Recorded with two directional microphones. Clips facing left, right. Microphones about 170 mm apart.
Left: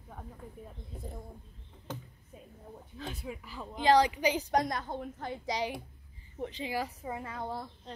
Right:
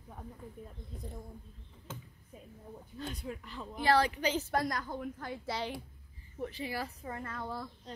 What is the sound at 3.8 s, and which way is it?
Speech, 15° left (ahead or behind).